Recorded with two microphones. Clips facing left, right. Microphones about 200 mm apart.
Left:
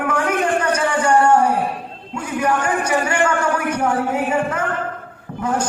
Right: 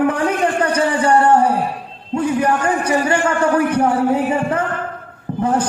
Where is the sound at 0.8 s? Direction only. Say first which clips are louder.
Right 3 dB; 30° right (ahead or behind).